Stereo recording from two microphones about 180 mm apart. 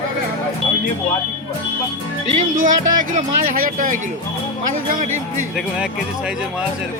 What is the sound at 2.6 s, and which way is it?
Speech, 45° right (ahead or behind).